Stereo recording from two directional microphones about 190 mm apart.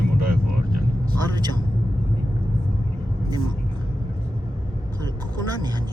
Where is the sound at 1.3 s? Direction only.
20° right (ahead or behind).